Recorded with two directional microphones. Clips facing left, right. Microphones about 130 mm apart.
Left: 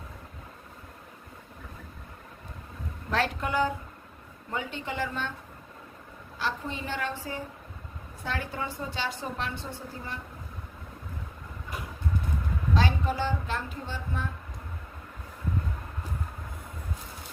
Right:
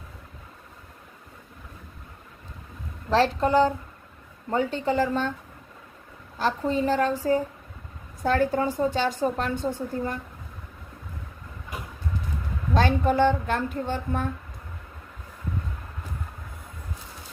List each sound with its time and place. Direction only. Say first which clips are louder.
3.1 s a woman's voice: right 8 dB; 35° right (ahead or behind)
6.4 s a woman's voice: right 9 dB; 35° right (ahead or behind)
12.7 s speech: right 7 dB; 50° right (ahead or behind)